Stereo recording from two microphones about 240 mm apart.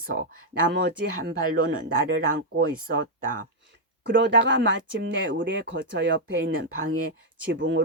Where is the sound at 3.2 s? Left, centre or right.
Right.